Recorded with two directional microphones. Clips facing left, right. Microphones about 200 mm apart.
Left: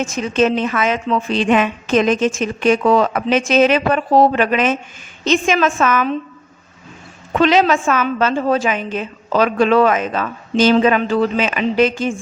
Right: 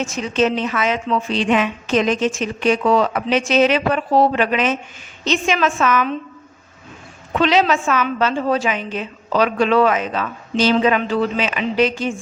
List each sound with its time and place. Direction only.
0.0 s a woman's voice: 50° left (ahead or behind)
7.3 s a woman's voice: 45° left (ahead or behind)